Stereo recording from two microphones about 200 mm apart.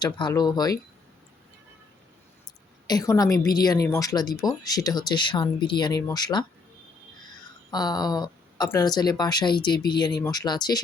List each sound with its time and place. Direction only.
0.0 s a woman's voice: 20° left (ahead or behind)
2.8 s a woman's voice: 20° left (ahead or behind)
7.7 s a woman's voice: 20° left (ahead or behind)